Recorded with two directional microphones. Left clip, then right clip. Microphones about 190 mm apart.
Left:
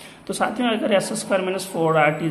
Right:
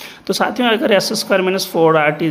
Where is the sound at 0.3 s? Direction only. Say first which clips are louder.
Right 7 dB; 40° right (ahead or behind).